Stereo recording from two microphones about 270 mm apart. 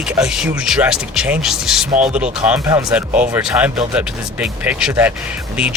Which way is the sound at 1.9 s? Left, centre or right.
Right.